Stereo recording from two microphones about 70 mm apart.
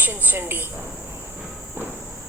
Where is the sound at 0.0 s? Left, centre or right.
Right.